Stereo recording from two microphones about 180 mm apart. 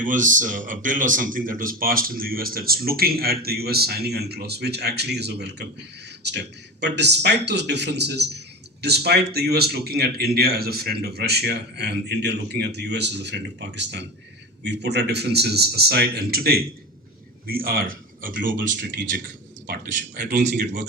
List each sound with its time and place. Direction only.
0.0 s a man's voice: 45° right (ahead or behind)